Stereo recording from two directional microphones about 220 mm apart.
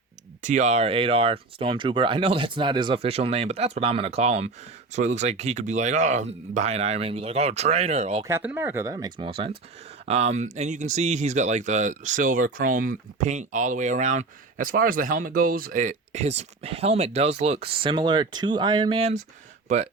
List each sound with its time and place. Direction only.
0.4 s speech: 30° right (ahead or behind)
8.2 s speech: 10° right (ahead or behind); by 19.9 s 30° right (ahead or behind)